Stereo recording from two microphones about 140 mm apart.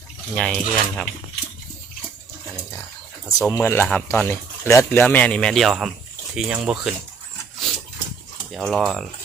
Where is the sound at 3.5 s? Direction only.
15° left (ahead or behind); by 6.9 s 5° right (ahead or behind).